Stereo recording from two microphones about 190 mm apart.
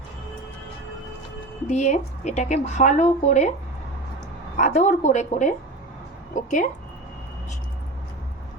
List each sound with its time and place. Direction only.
1.6 s speech: 40° left (ahead or behind)
4.5 s speech: 40° left (ahead or behind)